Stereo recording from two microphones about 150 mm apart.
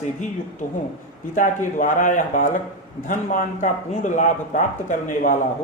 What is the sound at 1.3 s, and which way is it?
Speech, 60° left (ahead or behind).